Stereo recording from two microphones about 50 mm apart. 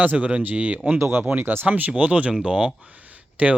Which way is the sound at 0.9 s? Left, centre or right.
Right.